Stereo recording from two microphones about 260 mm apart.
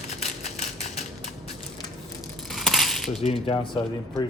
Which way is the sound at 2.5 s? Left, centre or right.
Centre.